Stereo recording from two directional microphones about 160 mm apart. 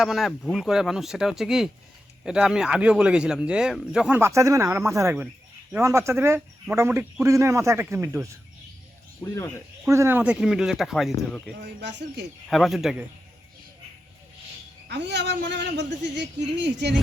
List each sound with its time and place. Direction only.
0.0 s speech: centre (ahead or behind)
4.2 s a man's voice: 20° right (ahead or behind)
9.2 s speech: 20° left (ahead or behind)
9.8 s speech: 15° right (ahead or behind)
11.6 s speech: 90° right
12.5 s speech: centre (ahead or behind)
14.8 s speech: 90° right